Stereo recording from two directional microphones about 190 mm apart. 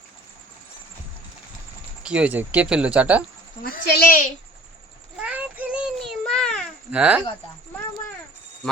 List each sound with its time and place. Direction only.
2.0 s speech: 5° right (ahead or behind)
3.6 s speech: 55° left (ahead or behind)
5.1 s a sound: 5° right (ahead or behind)
6.9 s speech: 5° right (ahead or behind)